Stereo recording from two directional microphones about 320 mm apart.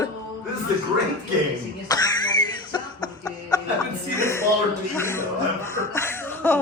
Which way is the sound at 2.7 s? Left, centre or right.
Centre.